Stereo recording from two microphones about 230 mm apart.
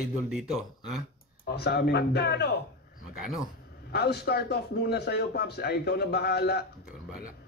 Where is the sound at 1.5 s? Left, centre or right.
Left.